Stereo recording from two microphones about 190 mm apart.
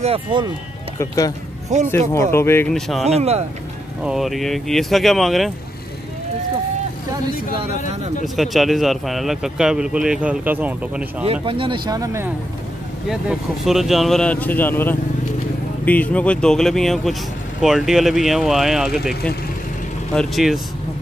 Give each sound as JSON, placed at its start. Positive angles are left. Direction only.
{"t": 0.0, "sound": "speech", "side_deg": -25}
{"t": 0.9, "sound": "speech", "side_deg": 20}
{"t": 1.7, "sound": "speech", "side_deg": -40}
{"t": 2.1, "sound": "speech", "side_deg": 15}
{"t": 2.7, "sound": "speech", "side_deg": 0}
{"t": 3.1, "sound": "speech", "side_deg": -35}
{"t": 4.0, "sound": "speech", "side_deg": 0}
{"t": 8.4, "sound": "speech", "side_deg": 0}
{"t": 11.4, "sound": "speech", "side_deg": -25}
{"t": 13.1, "sound": "speech", "side_deg": 0}